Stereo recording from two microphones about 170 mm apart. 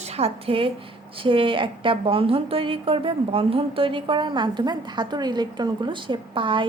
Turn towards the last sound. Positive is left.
turn(degrees=-30)  # may be behind; listen again after turning